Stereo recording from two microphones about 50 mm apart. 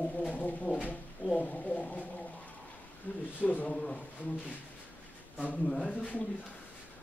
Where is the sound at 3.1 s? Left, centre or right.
Left.